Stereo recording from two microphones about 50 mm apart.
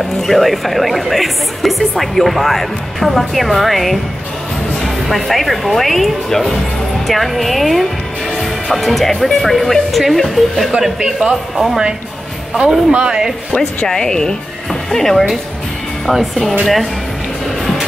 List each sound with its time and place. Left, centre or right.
0.0 s speech: centre
12.5 s speech: right
13.8 s speech: centre